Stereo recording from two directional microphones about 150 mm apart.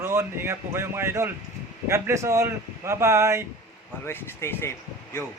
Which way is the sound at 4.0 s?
15° left (ahead or behind).